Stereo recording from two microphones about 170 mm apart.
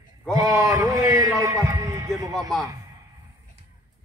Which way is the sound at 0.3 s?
20° right (ahead or behind).